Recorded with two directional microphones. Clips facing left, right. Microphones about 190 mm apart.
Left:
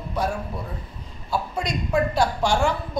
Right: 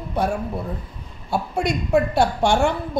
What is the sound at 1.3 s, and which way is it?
A man's voice, 60° right (ahead or behind).